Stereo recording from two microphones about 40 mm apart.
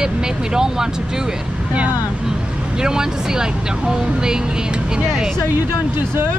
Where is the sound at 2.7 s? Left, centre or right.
Centre.